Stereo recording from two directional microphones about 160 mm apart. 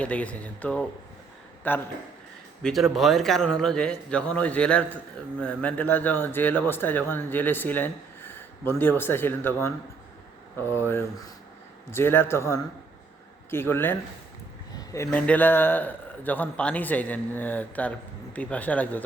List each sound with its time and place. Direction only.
0.0 s a man's voice: 10° left (ahead or behind)
2.6 s a man's voice: centre (ahead or behind)
14.9 s a man's voice: 15° left (ahead or behind)